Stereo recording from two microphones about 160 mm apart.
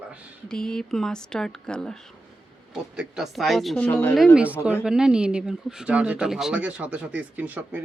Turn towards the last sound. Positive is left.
turn(degrees=-10)  # may be behind; listen again after turning